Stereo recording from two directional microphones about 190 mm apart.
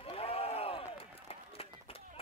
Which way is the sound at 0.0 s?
30° left (ahead or behind).